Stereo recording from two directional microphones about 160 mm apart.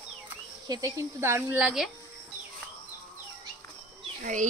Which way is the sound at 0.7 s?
20° right (ahead or behind).